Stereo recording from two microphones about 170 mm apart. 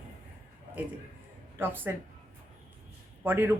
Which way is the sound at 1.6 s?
10° right (ahead or behind).